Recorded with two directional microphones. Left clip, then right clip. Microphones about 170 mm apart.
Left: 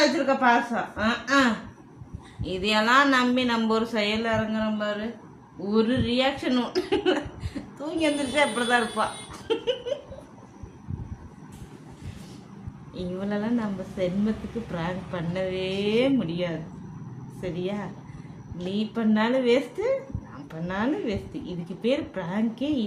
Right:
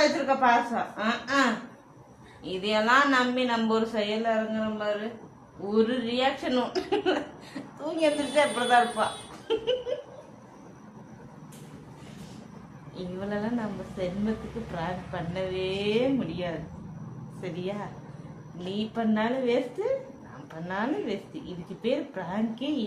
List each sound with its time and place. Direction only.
0.3 s speech: 30° left (ahead or behind)
13.0 s speech: 30° left (ahead or behind)